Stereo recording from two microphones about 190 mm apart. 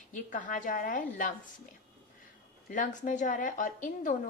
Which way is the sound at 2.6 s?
45° left (ahead or behind).